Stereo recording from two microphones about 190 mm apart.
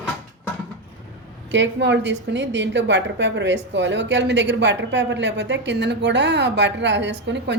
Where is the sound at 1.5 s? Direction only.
65° right (ahead or behind).